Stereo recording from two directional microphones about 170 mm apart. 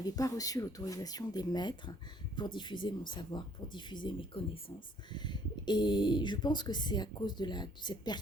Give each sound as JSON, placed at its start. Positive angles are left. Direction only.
{"t": 0.0, "sound": "speech", "side_deg": 20}